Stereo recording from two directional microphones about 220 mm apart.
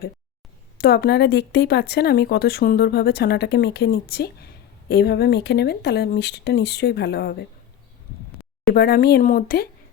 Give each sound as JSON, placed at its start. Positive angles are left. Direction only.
{"t": 0.8, "sound": "speech", "side_deg": 45}
{"t": 8.7, "sound": "speech", "side_deg": 45}